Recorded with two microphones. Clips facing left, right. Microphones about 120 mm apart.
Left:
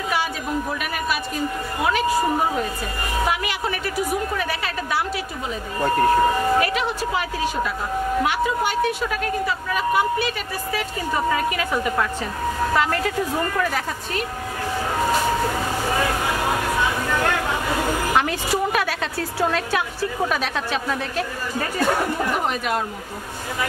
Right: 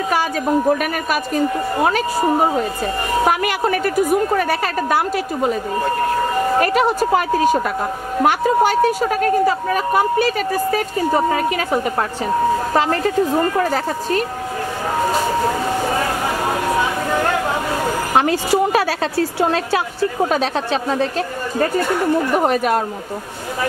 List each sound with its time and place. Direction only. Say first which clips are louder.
0.1 s speech: right 7 dB; 45° right (ahead or behind)
3.3 s speech: right 7 dB; 50° right (ahead or behind)
6.6 s a woman's voice: right 7 dB; 45° right (ahead or behind)
18.1 s a woman's voice: right 9 dB; 35° right (ahead or behind)
22.3 s speech: right 7 dB; 45° right (ahead or behind)